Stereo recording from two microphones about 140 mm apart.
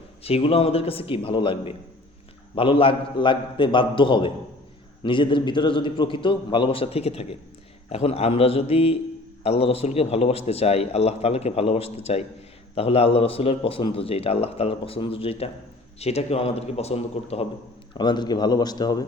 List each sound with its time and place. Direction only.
0.2 s a man's voice: 45° left (ahead or behind)
17.9 s a man's voice: 30° left (ahead or behind)